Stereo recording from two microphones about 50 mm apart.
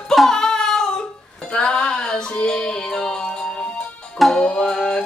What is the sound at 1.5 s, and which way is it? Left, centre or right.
Music, centre.